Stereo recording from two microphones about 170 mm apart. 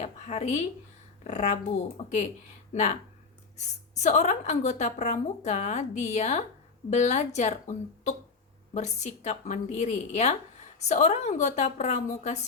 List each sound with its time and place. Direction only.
0.0 s a woman's voice: 45° left (ahead or behind)
2.7 s a woman's voice: 45° left (ahead or behind)